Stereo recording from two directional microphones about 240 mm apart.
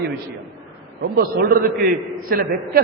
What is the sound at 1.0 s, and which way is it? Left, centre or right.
A man's voice, right.